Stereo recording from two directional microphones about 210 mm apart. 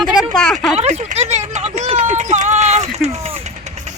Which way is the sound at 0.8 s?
30° right (ahead or behind).